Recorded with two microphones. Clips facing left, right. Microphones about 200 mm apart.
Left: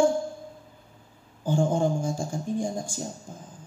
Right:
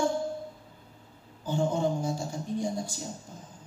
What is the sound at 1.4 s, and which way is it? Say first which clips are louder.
A man's voice: left 3 dB; 50° left (ahead or behind).